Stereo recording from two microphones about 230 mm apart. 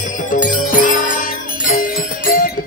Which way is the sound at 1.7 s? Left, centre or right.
Left.